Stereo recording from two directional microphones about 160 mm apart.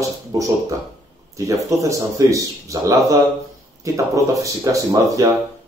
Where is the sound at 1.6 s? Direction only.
20° right (ahead or behind).